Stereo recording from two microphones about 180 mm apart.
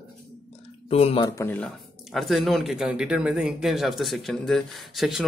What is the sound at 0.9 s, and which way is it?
Speech, 30° left (ahead or behind).